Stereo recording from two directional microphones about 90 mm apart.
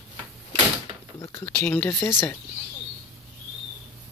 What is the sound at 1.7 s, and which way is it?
Speech, 25° left (ahead or behind).